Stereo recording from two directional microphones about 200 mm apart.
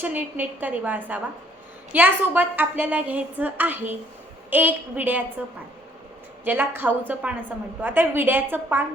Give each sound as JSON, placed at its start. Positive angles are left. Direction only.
{"t": 0.0, "sound": "a woman's voice", "side_deg": -10}
{"t": 6.4, "sound": "a woman's voice", "side_deg": -10}